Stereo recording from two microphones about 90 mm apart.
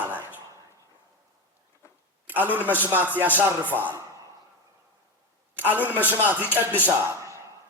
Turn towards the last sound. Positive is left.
turn(degrees=-35)  # may be behind; listen again after turning